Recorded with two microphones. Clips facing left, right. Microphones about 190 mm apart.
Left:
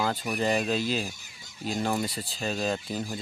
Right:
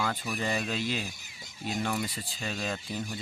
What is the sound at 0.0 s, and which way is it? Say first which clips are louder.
Speech: left 4 dB; 30° left (ahead or behind).